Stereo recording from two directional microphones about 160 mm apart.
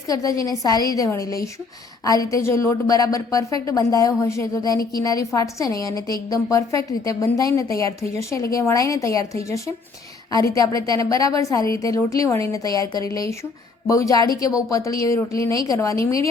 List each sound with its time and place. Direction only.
0.1 s a woman's voice: 20° left (ahead or behind)